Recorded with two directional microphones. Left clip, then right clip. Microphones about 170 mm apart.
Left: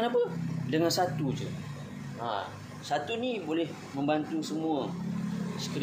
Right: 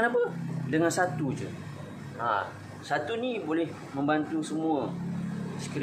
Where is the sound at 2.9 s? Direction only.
20° left (ahead or behind).